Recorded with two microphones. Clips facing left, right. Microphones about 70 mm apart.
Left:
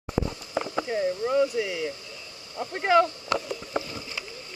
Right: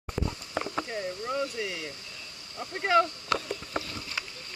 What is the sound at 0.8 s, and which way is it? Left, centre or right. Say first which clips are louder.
Speech: left 7 dB; centre.